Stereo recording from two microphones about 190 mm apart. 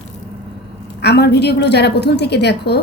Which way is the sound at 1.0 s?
60° left (ahead or behind).